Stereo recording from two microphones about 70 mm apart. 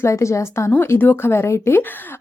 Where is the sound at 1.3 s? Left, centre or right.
Left.